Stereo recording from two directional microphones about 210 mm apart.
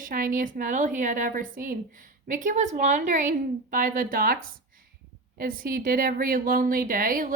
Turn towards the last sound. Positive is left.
turn(degrees=-40)  # may be behind; listen again after turning